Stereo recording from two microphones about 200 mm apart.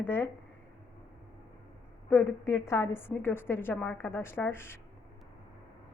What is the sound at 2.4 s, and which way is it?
A woman's voice, 15° left (ahead or behind).